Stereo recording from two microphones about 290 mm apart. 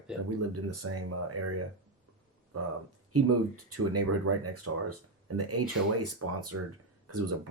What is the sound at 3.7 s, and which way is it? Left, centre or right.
Speech, right.